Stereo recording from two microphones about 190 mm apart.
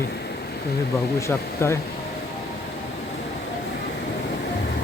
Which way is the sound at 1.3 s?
15° left (ahead or behind).